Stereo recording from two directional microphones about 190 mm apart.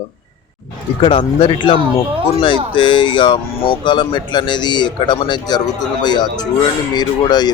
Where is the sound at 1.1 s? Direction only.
25° left (ahead or behind).